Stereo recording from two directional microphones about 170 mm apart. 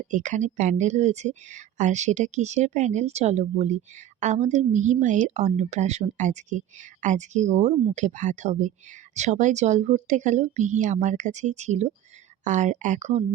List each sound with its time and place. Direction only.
0.0 s speech: 45° right (ahead or behind)